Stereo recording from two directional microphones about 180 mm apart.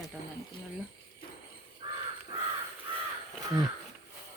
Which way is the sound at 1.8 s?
25° right (ahead or behind).